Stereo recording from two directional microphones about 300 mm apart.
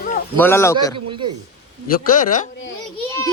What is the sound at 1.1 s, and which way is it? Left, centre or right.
Speech, centre.